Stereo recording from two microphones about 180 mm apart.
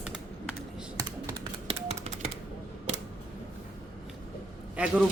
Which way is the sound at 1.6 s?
35° right (ahead or behind).